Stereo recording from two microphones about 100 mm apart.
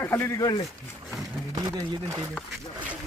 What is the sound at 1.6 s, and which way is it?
Speech, 45° right (ahead or behind).